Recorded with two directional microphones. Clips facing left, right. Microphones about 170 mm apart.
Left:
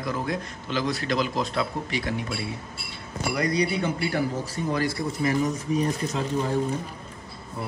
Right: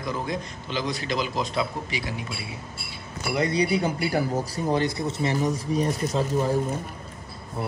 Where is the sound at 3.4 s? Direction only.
30° right (ahead or behind).